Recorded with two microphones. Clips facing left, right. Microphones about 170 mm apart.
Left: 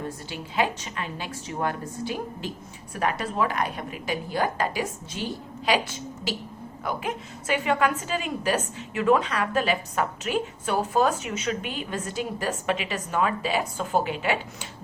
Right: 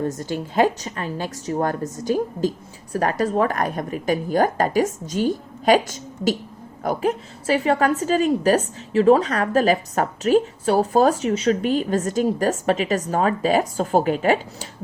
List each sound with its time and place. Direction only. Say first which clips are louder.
0.0 s a woman's voice: right 9 dB; 45° right (ahead or behind)